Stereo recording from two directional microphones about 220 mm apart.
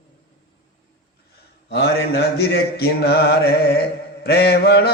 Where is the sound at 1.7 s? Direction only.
50° left (ahead or behind).